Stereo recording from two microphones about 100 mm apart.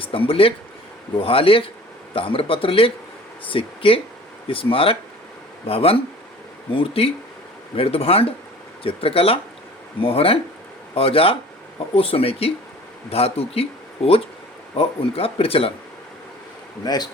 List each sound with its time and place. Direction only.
0.0 s a man's voice: 65° left (ahead or behind)
16.8 s speech: 40° left (ahead or behind)